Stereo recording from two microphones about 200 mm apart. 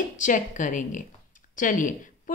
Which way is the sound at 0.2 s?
40° left (ahead or behind).